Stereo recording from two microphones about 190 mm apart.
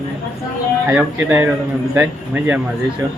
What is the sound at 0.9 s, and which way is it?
Speech, 10° right (ahead or behind).